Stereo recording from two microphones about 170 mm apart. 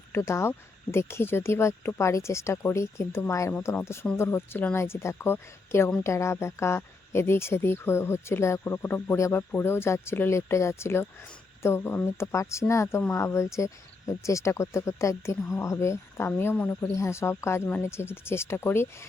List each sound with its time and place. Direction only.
0.1 s speech: 15° left (ahead or behind)